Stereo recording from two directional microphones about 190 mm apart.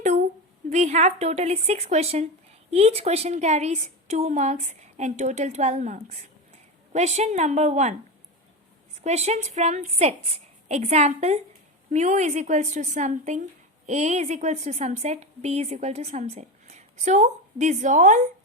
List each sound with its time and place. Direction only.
0.7 s a woman's voice: 35° right (ahead or behind)
9.0 s a woman's voice: 35° right (ahead or behind)